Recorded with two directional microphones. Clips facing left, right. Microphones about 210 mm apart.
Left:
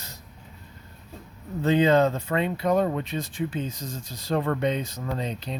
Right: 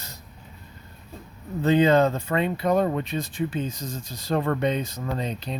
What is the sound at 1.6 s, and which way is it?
Speech, 45° right (ahead or behind).